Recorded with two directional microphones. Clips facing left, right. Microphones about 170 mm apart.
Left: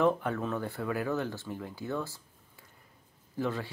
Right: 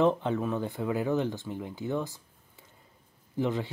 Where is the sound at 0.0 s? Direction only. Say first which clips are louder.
Right 2 dB; 20° right (ahead or behind).